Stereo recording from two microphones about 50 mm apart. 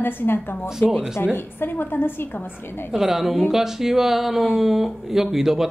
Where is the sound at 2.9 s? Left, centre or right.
Centre.